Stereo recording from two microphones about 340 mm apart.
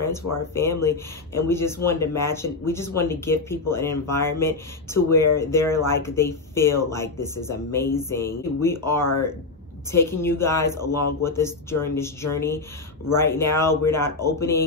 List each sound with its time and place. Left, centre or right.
0.6 s speech: centre